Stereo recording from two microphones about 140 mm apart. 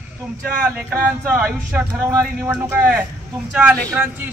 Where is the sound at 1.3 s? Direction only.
10° right (ahead or behind).